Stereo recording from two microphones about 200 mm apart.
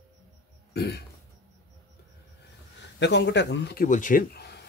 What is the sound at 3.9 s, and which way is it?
Speech, 40° left (ahead or behind).